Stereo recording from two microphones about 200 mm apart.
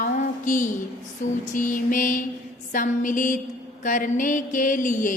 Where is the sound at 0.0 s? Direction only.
40° left (ahead or behind).